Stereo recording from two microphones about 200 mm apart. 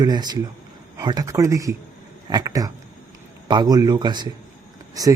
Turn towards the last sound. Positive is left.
turn(degrees=-15)  # may be behind; listen again after turning